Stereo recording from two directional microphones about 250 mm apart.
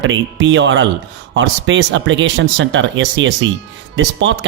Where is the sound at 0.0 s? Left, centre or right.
Right.